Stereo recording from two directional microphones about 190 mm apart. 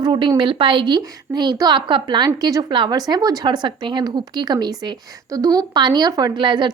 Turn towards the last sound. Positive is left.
turn(degrees=-25)  # may be behind; listen again after turning